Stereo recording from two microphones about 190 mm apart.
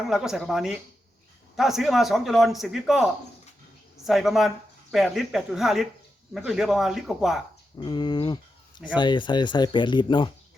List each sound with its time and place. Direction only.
0.1 s speech: centre (ahead or behind)
7.8 s speech: 25° left (ahead or behind)